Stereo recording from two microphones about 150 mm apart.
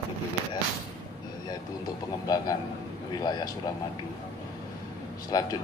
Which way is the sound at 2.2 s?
25° left (ahead or behind).